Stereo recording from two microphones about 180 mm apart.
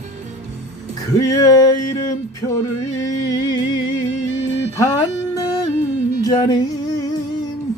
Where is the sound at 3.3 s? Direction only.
25° left (ahead or behind).